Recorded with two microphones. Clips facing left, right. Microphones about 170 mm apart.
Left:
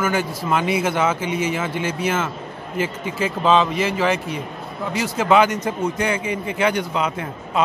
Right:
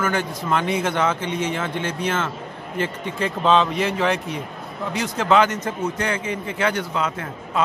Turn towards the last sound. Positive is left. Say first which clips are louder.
# left 2 dB
turn(degrees=15)  # may be behind; listen again after turning